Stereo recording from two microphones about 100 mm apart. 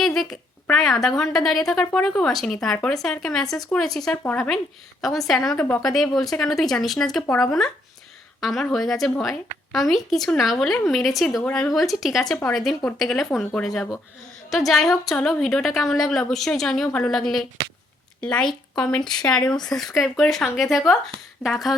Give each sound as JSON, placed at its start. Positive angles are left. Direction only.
{"t": 0.0, "sound": "a sound", "side_deg": 5}
{"t": 1.0, "sound": "a woman's voice", "side_deg": 5}
{"t": 5.5, "sound": "speech", "side_deg": 15}
{"t": 5.8, "sound": "a woman's voice", "side_deg": 0}
{"t": 8.4, "sound": "a woman's voice", "side_deg": 0}
{"t": 11.4, "sound": "speech", "side_deg": 10}
{"t": 11.7, "sound": "a woman's voice", "side_deg": 0}